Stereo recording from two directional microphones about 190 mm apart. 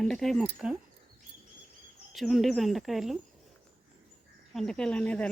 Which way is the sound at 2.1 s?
Centre (ahead or behind).